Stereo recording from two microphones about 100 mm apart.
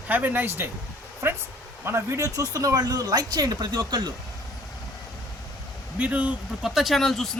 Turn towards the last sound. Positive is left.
turn(degrees=5)  # may be behind; listen again after turning